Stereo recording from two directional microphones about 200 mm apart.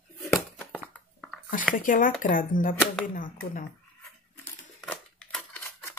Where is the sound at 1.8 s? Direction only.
40° left (ahead or behind).